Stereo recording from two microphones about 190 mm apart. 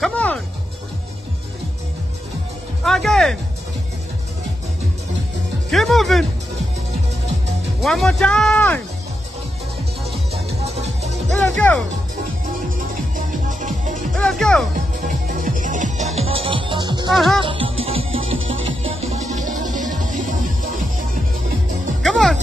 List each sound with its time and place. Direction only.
0.0 s music: 5° left (ahead or behind)
2.8 s music: centre (ahead or behind)
5.7 s music: centre (ahead or behind)
7.8 s speech: centre (ahead or behind)
10.6 s music: 35° right (ahead or behind)
11.5 s speech: 5° left (ahead or behind)
13.1 s music: 40° right (ahead or behind)
14.1 s music: 5° left (ahead or behind)
15.0 s music: 45° right (ahead or behind); by 17.1 s 20° right (ahead or behind)
17.1 s speech: centre (ahead or behind)
17.4 s music: 25° right (ahead or behind); by 21.2 s 45° right (ahead or behind)
22.0 s music: centre (ahead or behind)